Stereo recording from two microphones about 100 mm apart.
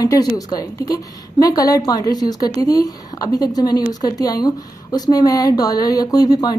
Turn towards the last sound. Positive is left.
turn(degrees=40)  # may be behind; listen again after turning